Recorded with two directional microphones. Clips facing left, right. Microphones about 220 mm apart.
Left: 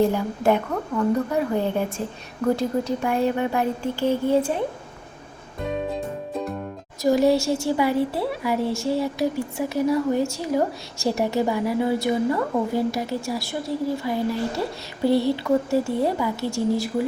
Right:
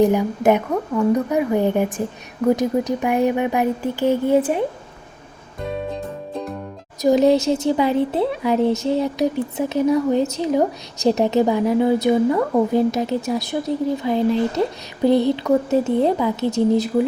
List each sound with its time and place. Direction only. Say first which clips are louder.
0.0 s a woman's voice: right 4 dB; 15° right (ahead or behind)
5.9 s music: even; 5° left (ahead or behind)
7.0 s a woman's voice: right 4 dB; 20° right (ahead or behind)